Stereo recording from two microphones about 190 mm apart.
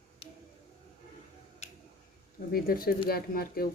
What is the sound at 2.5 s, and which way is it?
Speech, 50° left (ahead or behind).